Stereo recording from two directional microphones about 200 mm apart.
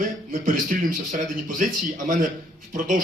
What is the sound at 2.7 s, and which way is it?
Speech, 40° right (ahead or behind).